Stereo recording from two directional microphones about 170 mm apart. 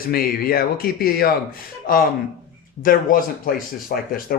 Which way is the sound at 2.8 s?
55° left (ahead or behind).